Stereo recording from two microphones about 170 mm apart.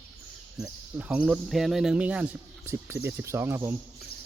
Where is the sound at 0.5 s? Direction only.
5° right (ahead or behind).